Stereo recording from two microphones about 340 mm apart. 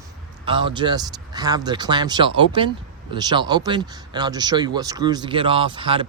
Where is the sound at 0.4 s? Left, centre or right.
Centre.